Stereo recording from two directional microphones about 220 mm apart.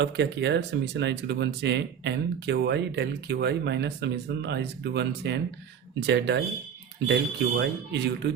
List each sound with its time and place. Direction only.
0.0 s speech: 50° right (ahead or behind)